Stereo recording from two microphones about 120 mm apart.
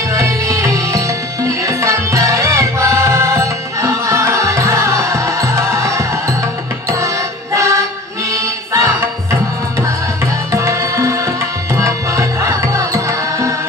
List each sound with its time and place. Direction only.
0.1 s music: 25° right (ahead or behind)
10.5 s tabla: 25° right (ahead or behind)